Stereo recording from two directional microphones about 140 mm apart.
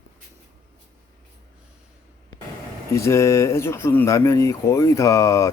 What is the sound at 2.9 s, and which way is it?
Speech, 20° left (ahead or behind).